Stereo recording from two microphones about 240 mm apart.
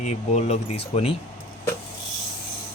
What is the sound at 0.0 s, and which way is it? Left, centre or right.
Speech, left.